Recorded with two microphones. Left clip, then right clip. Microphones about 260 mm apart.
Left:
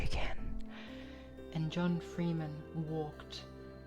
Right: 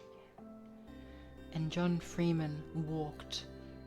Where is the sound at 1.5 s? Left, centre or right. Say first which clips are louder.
Right 1 dB; centre.